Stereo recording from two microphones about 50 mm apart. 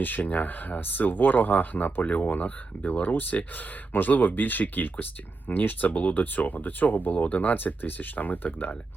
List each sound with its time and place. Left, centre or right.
0.0 s speech: left